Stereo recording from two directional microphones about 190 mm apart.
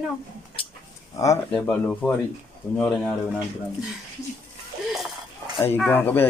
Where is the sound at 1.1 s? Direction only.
15° left (ahead or behind).